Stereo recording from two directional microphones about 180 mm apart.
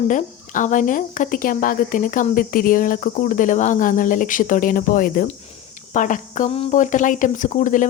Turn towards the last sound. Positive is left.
turn(degrees=45)  # may be behind; listen again after turning